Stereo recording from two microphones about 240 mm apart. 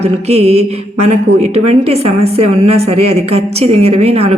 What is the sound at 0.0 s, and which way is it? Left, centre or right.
A woman's voice, right.